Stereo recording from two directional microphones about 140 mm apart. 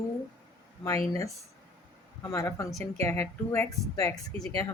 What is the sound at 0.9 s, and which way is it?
Speech, 25° left (ahead or behind).